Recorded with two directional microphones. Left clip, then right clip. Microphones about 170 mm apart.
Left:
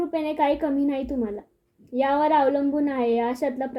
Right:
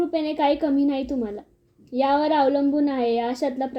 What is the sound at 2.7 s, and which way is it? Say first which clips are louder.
A woman's voice: right 1 dB; 10° right (ahead or behind).